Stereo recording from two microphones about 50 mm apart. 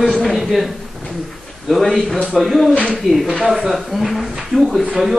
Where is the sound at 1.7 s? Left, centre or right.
Centre.